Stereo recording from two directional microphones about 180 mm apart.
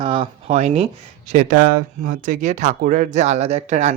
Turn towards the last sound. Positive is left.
turn(degrees=-40)  # may be behind; listen again after turning